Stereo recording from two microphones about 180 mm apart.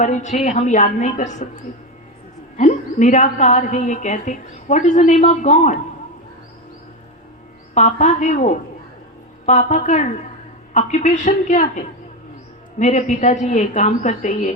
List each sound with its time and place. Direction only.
0.0 s a woman's voice: 40° left (ahead or behind)
2.6 s a woman's voice: 40° left (ahead or behind)
7.7 s a woman's voice: 40° left (ahead or behind)
12.8 s a woman's voice: 40° left (ahead or behind)